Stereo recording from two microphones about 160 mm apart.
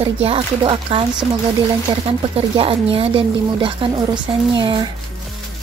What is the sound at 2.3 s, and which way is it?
Speech, 35° right (ahead or behind).